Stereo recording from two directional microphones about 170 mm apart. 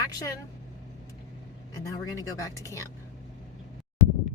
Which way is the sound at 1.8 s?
20° left (ahead or behind).